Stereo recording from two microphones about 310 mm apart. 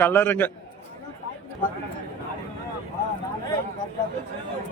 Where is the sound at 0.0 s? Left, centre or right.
Centre.